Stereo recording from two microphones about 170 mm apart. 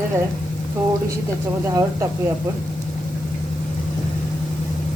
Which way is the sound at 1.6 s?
20° right (ahead or behind).